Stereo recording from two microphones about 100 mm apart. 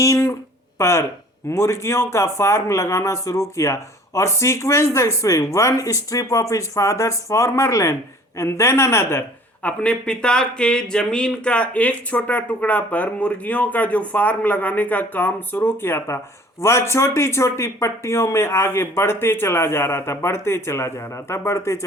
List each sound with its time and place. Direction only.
0.0 s speech: 30° left (ahead or behind)
9.6 s speech: 10° left (ahead or behind); by 21.8 s 30° left (ahead or behind)